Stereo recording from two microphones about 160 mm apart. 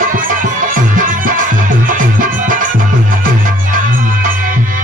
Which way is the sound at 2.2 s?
55° right (ahead or behind).